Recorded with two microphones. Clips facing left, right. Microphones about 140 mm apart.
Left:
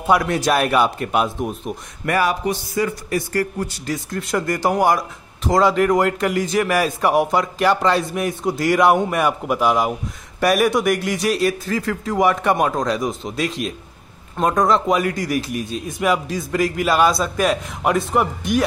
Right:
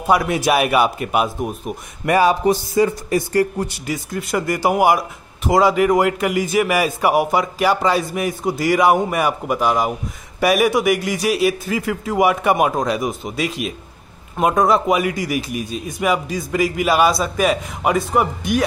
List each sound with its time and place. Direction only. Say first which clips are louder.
0.0 s speech: right 1 dB; 5° right (ahead or behind)
2.0 s a man's voice: right 5 dB; 25° right (ahead or behind)
3.8 s a man's voice: right 1 dB; 5° right (ahead or behind)